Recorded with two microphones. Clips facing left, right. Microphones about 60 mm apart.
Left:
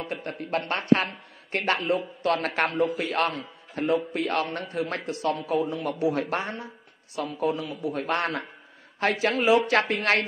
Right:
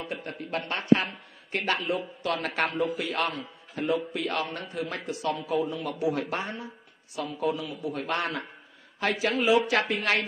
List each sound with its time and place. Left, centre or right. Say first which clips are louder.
0.0 s a man's voice: left 3 dB; left